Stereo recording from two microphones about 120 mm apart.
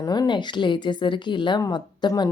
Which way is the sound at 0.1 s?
35° left (ahead or behind).